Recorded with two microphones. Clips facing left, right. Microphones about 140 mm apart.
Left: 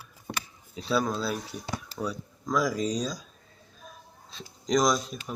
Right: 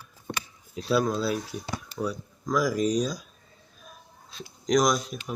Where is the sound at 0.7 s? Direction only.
Centre (ahead or behind).